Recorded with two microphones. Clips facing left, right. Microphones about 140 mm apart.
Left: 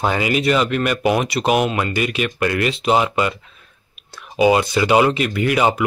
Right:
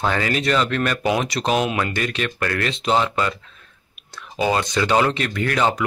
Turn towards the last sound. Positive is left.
turn(degrees=10)  # may be behind; listen again after turning